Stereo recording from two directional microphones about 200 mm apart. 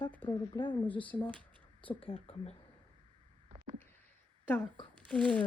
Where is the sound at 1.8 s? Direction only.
25° left (ahead or behind).